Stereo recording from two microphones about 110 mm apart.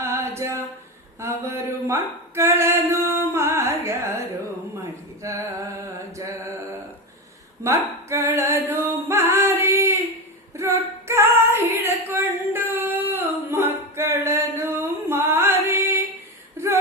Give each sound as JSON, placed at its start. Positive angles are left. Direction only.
{"t": 0.0, "sound": "a sound", "side_deg": -25}
{"t": 5.2, "sound": "mantra", "side_deg": -30}
{"t": 7.6, "sound": "singing", "side_deg": -25}
{"t": 10.6, "sound": "female singing", "side_deg": -25}
{"t": 16.6, "sound": "whimper", "side_deg": -25}